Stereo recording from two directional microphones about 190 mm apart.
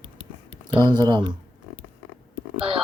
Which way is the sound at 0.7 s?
25° right (ahead or behind).